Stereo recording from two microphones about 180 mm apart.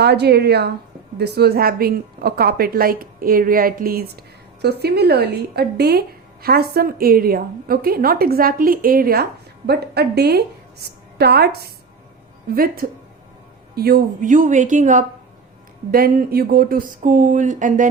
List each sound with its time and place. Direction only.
0.0 s speech: 65° right (ahead or behind); by 15.0 s 45° right (ahead or behind)
15.9 s speech: 55° right (ahead or behind)